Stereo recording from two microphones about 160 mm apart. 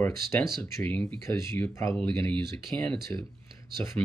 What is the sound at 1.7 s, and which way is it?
Speech, 20° left (ahead or behind).